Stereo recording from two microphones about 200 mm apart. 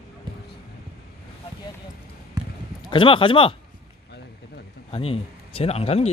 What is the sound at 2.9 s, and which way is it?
Speech, 25° left (ahead or behind).